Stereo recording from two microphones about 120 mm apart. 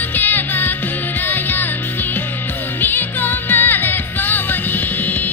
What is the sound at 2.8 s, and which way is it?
Music, 15° left (ahead or behind).